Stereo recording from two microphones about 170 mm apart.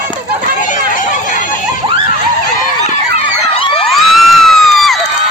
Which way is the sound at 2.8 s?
35° left (ahead or behind).